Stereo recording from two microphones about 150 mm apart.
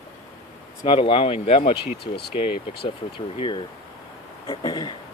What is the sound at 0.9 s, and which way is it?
Speech, 35° left (ahead or behind).